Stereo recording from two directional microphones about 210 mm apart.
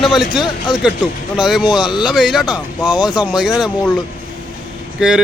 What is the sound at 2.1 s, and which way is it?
Speech, centre (ahead or behind).